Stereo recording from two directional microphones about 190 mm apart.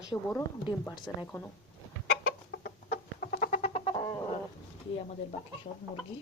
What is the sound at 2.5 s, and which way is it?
Chicken, 60° left (ahead or behind).